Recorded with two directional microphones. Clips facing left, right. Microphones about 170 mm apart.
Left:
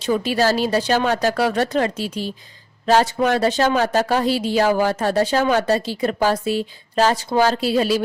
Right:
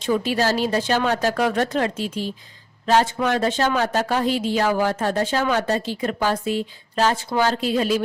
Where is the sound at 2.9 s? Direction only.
40° left (ahead or behind).